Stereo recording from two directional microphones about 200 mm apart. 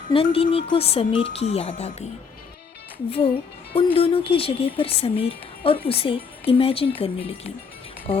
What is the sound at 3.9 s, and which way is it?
Speech, 30° left (ahead or behind).